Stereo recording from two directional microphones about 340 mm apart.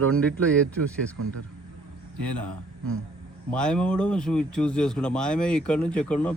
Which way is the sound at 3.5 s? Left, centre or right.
Centre.